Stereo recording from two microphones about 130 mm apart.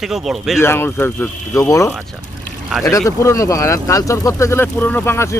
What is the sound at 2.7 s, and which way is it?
Speech, centre (ahead or behind).